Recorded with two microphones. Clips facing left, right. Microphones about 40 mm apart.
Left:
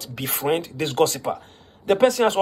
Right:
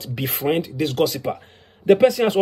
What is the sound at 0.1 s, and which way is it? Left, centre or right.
Speech, centre.